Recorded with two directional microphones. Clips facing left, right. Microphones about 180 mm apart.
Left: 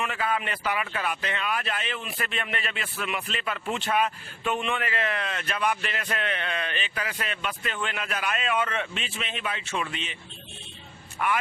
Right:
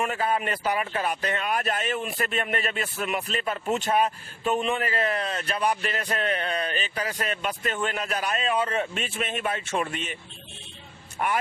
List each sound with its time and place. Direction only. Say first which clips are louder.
0.0 s speech: right 3 dB; 40° right (ahead or behind)
11.2 s speech: even; 40° right (ahead or behind)